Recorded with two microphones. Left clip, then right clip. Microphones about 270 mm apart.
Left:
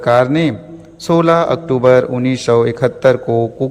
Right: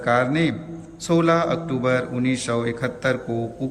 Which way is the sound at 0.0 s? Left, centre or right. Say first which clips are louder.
Left 8 dB; centre.